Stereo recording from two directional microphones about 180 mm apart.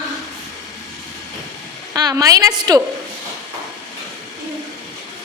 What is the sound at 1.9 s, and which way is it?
Speech, 20° right (ahead or behind).